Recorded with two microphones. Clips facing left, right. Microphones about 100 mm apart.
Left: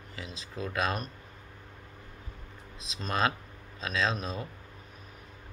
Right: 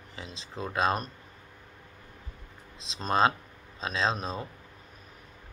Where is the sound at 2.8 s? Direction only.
30° right (ahead or behind).